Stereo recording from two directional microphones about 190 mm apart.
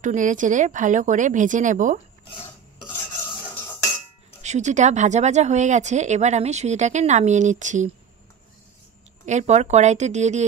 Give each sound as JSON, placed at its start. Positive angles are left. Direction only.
{"t": 0.0, "sound": "speech", "side_deg": -40}
{"t": 4.4, "sound": "speech", "side_deg": -40}
{"t": 9.2, "sound": "speech", "side_deg": -40}